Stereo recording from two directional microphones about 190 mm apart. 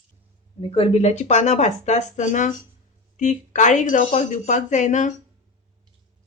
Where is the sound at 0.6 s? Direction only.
30° left (ahead or behind).